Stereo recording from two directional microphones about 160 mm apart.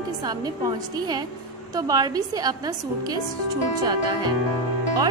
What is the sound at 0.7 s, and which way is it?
A woman's voice, 25° right (ahead or behind).